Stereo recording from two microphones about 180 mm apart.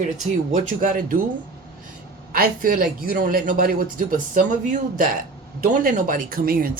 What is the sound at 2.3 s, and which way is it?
Speech, 55° right (ahead or behind).